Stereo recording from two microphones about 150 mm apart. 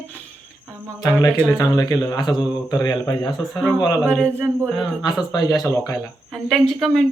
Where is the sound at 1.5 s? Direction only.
25° left (ahead or behind).